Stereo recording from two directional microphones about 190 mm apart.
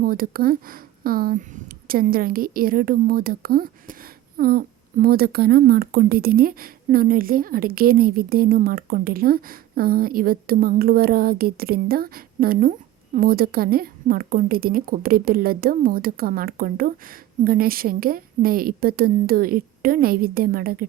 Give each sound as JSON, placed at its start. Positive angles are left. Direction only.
{"t": 0.0, "sound": "speech", "side_deg": -50}